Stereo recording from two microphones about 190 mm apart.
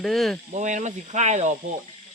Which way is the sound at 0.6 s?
40° right (ahead or behind).